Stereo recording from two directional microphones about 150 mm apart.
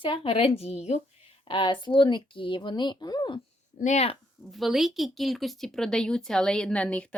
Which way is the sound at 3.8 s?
50° left (ahead or behind).